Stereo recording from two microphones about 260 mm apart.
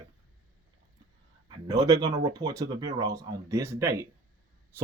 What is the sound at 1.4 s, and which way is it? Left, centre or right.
A man's voice, centre.